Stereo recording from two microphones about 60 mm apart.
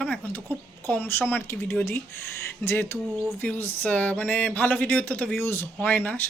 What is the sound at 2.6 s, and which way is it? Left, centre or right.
Speech, left.